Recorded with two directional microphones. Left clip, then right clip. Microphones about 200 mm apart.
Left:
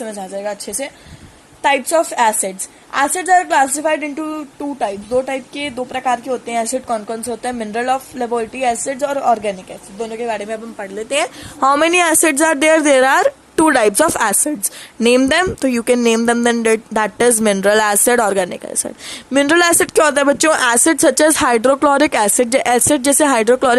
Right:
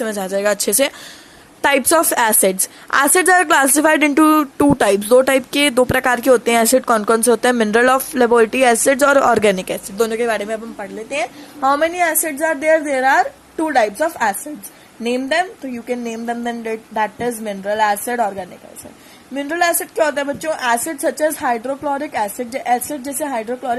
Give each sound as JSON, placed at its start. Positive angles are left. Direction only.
{"t": 0.0, "sound": "a woman's voice", "side_deg": -25}
{"t": 10.2, "sound": "a man's voice", "side_deg": -10}
{"t": 11.1, "sound": "speech", "side_deg": 25}